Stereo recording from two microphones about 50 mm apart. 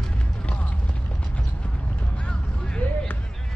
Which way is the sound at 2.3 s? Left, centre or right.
Centre.